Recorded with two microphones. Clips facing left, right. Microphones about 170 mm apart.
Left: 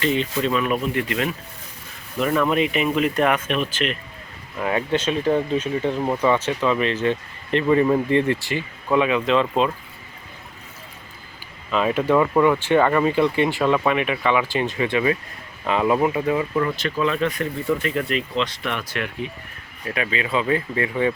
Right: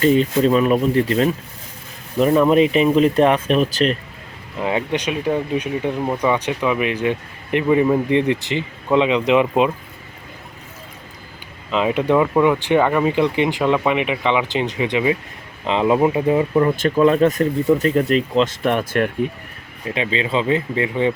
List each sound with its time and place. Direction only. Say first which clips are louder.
0.0 s speech: right 7 dB; 40° right (ahead or behind)
4.6 s speech: right 1 dB; 20° right (ahead or behind)
11.7 s speech: right 2 dB; 20° right (ahead or behind)
16.7 s speech: right 8 dB; 50° right (ahead or behind)
19.8 s speech: right 3 dB; 25° right (ahead or behind)